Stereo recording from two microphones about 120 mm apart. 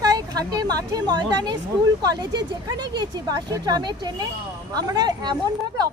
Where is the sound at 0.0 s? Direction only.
30° right (ahead or behind).